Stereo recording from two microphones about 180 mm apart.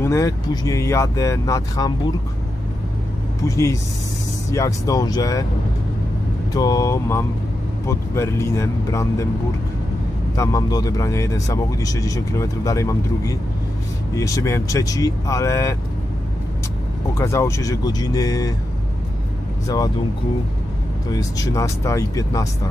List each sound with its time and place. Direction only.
0.0 s speech: 15° left (ahead or behind)
3.4 s speech: 15° left (ahead or behind)
6.5 s speech: 20° left (ahead or behind)
10.3 s speech: 15° left (ahead or behind)
17.1 s speech: 15° left (ahead or behind)
21.1 s speech: 20° left (ahead or behind)